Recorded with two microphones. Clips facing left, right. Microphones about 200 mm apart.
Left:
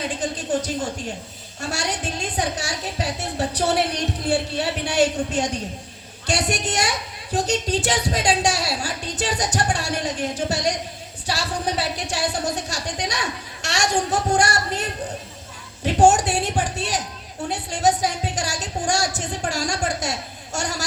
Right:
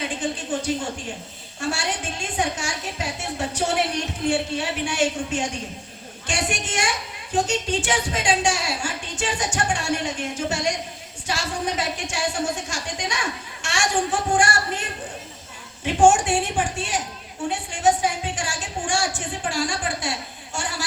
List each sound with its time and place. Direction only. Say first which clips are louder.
0.2 s a woman's voice: right 1 dB; 40° left (ahead or behind)
1.7 s a woman's voice: left 2 dB; 40° left (ahead or behind)
17.5 s a sound: even; 40° left (ahead or behind)